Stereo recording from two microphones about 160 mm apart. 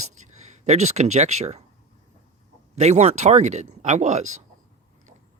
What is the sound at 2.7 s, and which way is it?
Speech, 45° right (ahead or behind).